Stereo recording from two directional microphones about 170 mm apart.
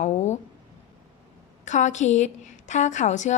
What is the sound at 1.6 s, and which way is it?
A woman's voice, 45° left (ahead or behind).